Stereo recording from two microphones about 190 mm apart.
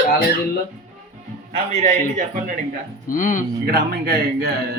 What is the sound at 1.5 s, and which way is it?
Speech, 30° right (ahead or behind).